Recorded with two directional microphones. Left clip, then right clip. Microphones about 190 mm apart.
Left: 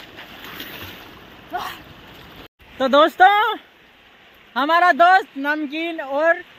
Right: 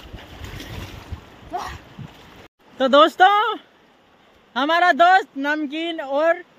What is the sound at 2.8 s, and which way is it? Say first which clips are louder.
Speech: even; 5° right (ahead or behind).